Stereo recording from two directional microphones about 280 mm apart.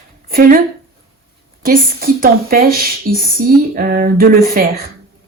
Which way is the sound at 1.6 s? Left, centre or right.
Right.